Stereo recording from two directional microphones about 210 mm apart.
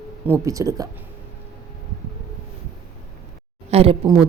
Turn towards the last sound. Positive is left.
turn(degrees=-25)  # may be behind; listen again after turning